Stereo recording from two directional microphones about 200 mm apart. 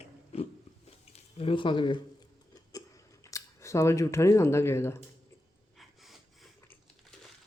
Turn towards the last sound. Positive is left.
turn(degrees=0)  # may be behind; listen again after turning